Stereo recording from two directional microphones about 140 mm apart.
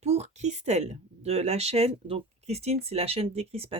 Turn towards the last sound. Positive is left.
turn(degrees=-45)  # may be behind; listen again after turning